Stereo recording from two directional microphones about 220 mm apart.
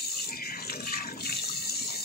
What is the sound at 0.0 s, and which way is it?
Water, 45° left (ahead or behind).